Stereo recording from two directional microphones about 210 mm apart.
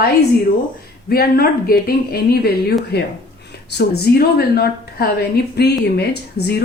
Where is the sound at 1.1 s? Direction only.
45° left (ahead or behind).